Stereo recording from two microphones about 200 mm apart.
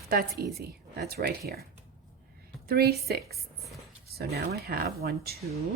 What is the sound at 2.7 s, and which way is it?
Speech, 50° right (ahead or behind).